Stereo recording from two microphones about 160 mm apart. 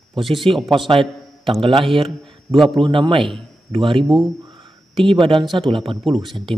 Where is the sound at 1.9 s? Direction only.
35° right (ahead or behind).